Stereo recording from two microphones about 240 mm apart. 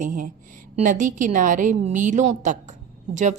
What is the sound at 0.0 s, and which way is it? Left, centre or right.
A woman's voice, right.